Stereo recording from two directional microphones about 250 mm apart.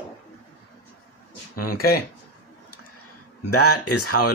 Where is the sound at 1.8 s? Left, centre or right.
Left.